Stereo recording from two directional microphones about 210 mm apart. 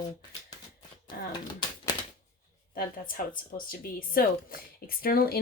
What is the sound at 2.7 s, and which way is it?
Speech, 40° left (ahead or behind).